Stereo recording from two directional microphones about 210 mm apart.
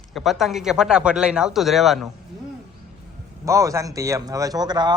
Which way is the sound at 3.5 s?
15° right (ahead or behind).